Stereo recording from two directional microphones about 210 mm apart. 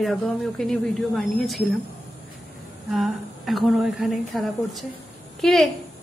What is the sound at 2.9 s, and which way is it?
A woman's voice, centre (ahead or behind).